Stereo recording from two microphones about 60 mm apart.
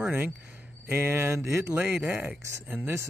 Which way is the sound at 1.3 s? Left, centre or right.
Right.